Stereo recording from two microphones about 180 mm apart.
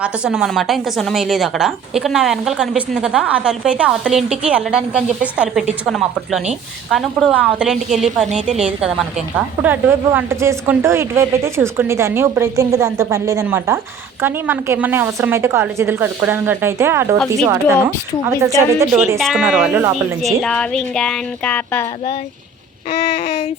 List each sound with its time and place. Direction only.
0.0 s a woman's voice: 5° right (ahead or behind)
8.3 s a woman's voice: 40° right (ahead or behind)
8.5 s a woman's voice: 5° right (ahead or behind)
19.2 s a woman's voice: 5° right (ahead or behind)
20.2 s a woman's voice: 5° left (ahead or behind)
22.9 s child singing: 35° left (ahead or behind)